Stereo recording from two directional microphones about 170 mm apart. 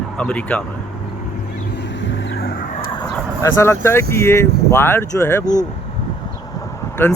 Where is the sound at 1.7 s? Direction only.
90° left; by 2.7 s 65° left (ahead or behind).